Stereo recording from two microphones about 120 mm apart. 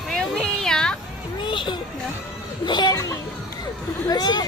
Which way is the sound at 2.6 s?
35° left (ahead or behind).